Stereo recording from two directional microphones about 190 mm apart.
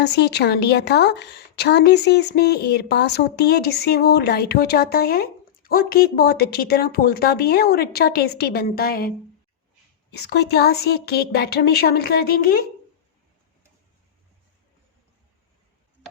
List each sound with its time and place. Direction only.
0.0 s a woman's voice: 60° left (ahead or behind)